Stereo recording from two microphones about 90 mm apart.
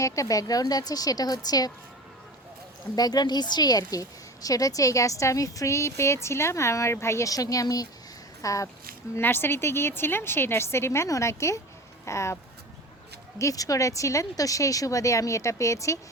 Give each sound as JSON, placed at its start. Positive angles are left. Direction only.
{"t": 0.0, "sound": "a woman's voice", "side_deg": 40}
{"t": 2.9, "sound": "a woman's voice", "side_deg": 45}
{"t": 9.1, "sound": "a woman's voice", "side_deg": 25}
{"t": 13.4, "sound": "speech", "side_deg": 40}